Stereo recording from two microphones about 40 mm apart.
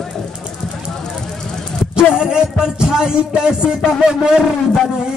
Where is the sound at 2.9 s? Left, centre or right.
Centre.